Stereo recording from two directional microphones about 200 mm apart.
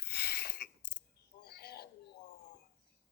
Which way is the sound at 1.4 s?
55° left (ahead or behind).